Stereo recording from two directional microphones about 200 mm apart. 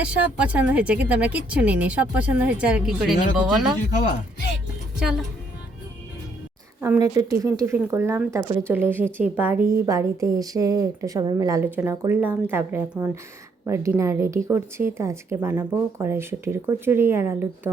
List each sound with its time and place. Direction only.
0.0 s speech: 5° right (ahead or behind)
3.8 s speech: 55° left (ahead or behind)
4.9 s a woman's voice: 5° right (ahead or behind)
6.8 s speech: 15° right (ahead or behind)